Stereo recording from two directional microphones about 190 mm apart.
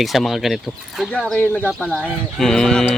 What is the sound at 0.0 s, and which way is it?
Speech, centre (ahead or behind).